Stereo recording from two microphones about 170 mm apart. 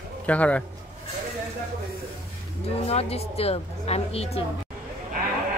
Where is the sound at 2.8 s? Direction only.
35° left (ahead or behind).